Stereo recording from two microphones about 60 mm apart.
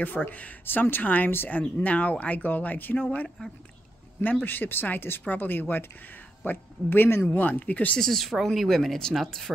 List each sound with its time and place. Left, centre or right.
0.0 s speech: left
4.2 s speech: left
8.0 s speech: centre